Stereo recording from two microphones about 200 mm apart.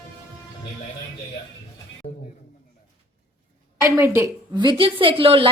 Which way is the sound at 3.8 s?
15° right (ahead or behind).